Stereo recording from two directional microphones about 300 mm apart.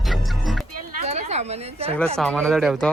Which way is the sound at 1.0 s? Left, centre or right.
Right.